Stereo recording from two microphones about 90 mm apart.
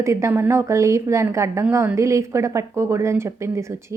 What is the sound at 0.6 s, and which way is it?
A woman's voice, 35° right (ahead or behind).